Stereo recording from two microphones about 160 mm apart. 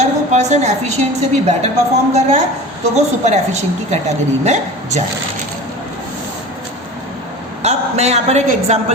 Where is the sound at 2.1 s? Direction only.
45° right (ahead or behind).